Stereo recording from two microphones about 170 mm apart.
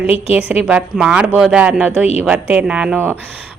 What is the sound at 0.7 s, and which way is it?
Speech, 5° right (ahead or behind).